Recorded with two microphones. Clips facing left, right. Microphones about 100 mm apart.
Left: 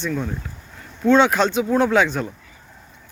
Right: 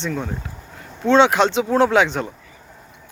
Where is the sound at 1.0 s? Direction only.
25° right (ahead or behind).